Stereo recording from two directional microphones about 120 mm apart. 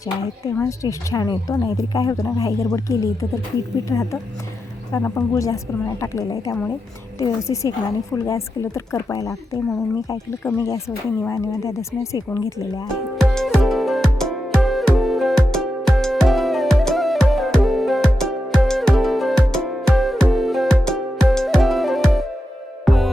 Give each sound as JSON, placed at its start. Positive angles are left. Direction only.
{"t": 0.5, "sound": "a woman's voice", "side_deg": 25}
{"t": 13.1, "sound": "music", "side_deg": 0}